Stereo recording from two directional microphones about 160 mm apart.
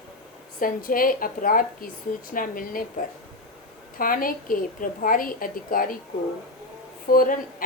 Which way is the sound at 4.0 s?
60° left (ahead or behind).